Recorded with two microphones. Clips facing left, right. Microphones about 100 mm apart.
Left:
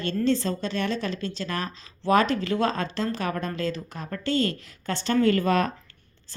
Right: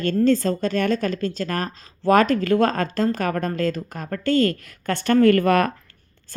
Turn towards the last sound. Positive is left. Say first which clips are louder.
# right 6 dB
turn(degrees=-55)  # may be behind; listen again after turning